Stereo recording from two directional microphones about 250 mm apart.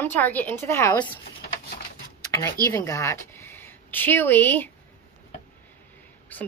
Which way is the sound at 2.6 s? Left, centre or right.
Centre.